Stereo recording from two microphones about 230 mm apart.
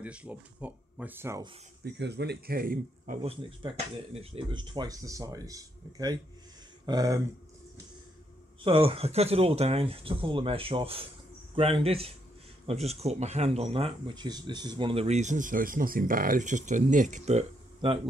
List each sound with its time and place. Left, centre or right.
0.0 s speech: centre
2.0 s speech: right
3.3 s speech: right
8.6 s speech: right